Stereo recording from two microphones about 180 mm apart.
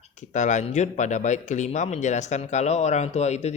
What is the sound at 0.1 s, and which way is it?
Speech, 45° left (ahead or behind).